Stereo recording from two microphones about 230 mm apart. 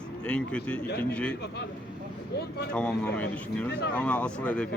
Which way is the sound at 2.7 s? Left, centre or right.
Centre.